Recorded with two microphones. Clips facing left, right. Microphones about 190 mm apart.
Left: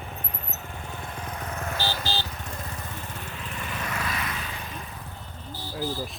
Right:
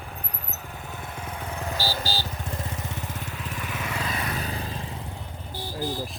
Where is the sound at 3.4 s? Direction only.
Centre (ahead or behind).